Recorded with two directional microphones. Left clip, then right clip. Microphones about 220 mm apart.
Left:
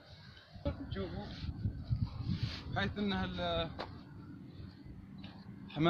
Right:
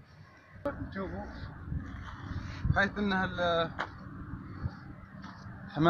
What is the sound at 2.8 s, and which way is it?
Speech, centre (ahead or behind).